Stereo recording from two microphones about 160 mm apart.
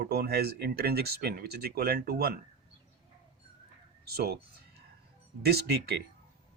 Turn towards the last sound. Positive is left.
turn(degrees=-80)